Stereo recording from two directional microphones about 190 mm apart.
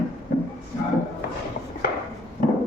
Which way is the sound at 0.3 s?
45° left (ahead or behind).